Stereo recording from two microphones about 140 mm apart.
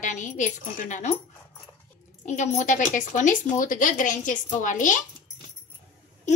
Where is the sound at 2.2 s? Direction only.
55° left (ahead or behind).